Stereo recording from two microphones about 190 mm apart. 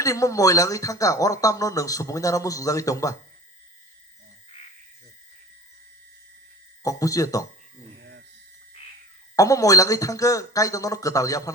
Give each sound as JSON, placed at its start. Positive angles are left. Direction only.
{"t": 0.0, "sound": "speech", "side_deg": 15}
{"t": 6.8, "sound": "speech", "side_deg": 15}
{"t": 9.3, "sound": "speech", "side_deg": 15}